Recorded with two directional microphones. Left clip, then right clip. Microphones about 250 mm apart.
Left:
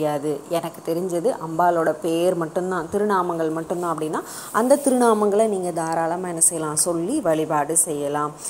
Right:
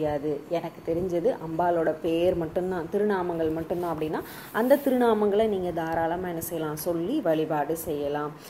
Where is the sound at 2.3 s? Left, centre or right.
Left.